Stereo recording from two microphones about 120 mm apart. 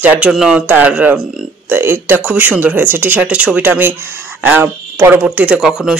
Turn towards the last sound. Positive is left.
turn(degrees=-5)  # may be behind; listen again after turning